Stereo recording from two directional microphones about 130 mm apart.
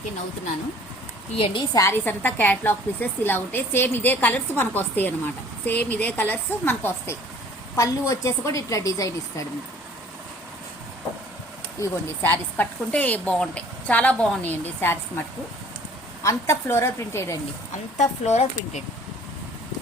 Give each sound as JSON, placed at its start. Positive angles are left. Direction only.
{"t": 1.7, "sound": "a woman's voice", "side_deg": 25}
{"t": 2.0, "sound": "a woman's voice", "side_deg": 15}
{"t": 11.8, "sound": "a woman's voice", "side_deg": 15}
{"t": 16.2, "sound": "a woman's voice", "side_deg": 20}
{"t": 17.9, "sound": "speech", "side_deg": 60}